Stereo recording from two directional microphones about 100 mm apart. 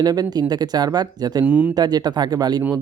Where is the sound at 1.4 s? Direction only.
15° right (ahead or behind).